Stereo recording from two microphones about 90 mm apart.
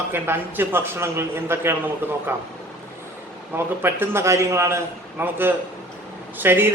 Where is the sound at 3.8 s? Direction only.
25° right (ahead or behind).